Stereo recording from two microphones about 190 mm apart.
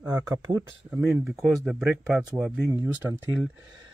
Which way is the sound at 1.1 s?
Centre (ahead or behind).